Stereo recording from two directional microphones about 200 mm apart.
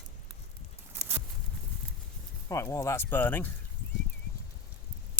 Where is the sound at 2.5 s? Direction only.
15° left (ahead or behind).